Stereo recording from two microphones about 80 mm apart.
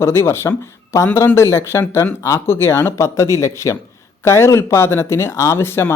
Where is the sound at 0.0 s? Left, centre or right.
Left.